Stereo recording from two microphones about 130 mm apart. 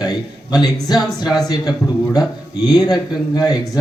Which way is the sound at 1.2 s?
Centre (ahead or behind).